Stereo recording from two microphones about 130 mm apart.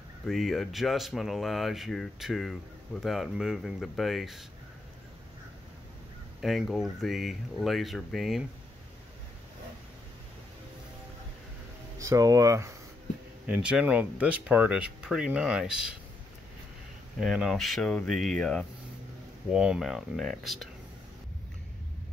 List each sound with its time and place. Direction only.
0.3 s speech: centre (ahead or behind)
6.4 s speech: centre (ahead or behind)
12.0 s speech: 25° right (ahead or behind)
13.5 s speech: 10° right (ahead or behind)
17.2 s speech: centre (ahead or behind)
19.5 s speech: 5° right (ahead or behind)